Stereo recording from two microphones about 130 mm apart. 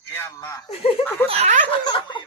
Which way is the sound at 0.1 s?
15° left (ahead or behind).